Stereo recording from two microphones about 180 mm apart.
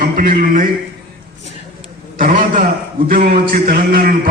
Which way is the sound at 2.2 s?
45° right (ahead or behind).